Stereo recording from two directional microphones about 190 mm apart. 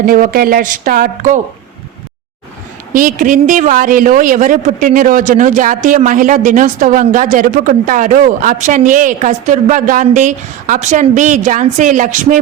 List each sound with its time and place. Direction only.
0.0 s a man's voice: 50° right (ahead or behind)
2.9 s a man's voice: 45° right (ahead or behind)